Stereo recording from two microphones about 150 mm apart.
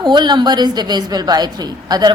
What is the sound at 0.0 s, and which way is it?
A woman's voice, 30° right (ahead or behind).